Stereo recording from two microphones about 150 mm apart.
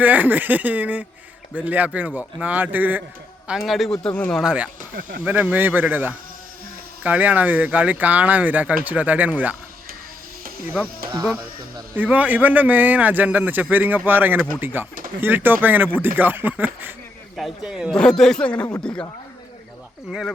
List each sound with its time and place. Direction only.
0.0 s a man's voice: 10° right (ahead or behind)
3.6 s speech: centre (ahead or behind)
4.4 s a man's voice: 5° right (ahead or behind)
4.9 s speech: 70° right (ahead or behind)
5.2 s a man's voice: 10° right (ahead or behind)
11.9 s a man's voice: 10° right (ahead or behind); by 19.0 s 5° left (ahead or behind)
20.1 s speech: 5° right (ahead or behind)